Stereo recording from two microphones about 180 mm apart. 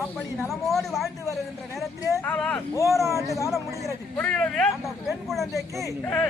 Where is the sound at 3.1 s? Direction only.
15° right (ahead or behind).